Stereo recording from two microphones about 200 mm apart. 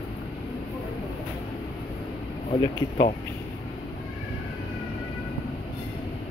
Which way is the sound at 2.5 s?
35° left (ahead or behind).